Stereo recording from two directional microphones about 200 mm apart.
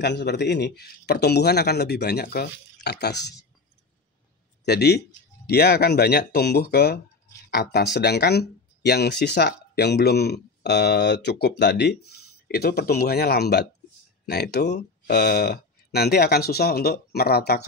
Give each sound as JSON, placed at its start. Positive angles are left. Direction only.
{"t": 0.0, "sound": "speech", "side_deg": 55}
{"t": 4.6, "sound": "speech", "side_deg": 55}